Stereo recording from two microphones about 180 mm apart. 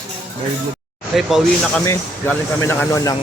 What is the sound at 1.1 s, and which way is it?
Speech, centre (ahead or behind).